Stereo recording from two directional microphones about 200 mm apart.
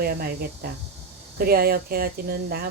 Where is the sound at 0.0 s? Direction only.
50° right (ahead or behind).